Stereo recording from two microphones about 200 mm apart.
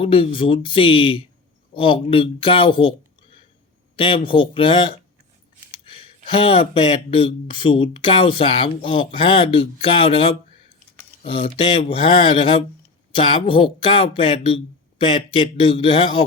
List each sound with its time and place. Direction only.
0.0 s speech: 25° left (ahead or behind)
3.9 s speech: 25° left (ahead or behind)